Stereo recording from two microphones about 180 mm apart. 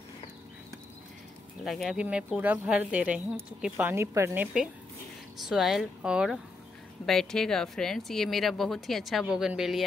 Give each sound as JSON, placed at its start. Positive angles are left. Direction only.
{"t": 1.6, "sound": "speech", "side_deg": 0}